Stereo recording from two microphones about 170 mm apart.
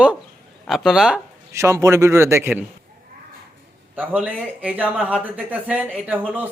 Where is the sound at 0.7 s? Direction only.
Centre (ahead or behind).